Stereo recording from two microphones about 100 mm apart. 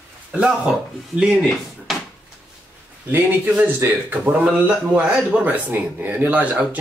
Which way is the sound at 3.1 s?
20° right (ahead or behind).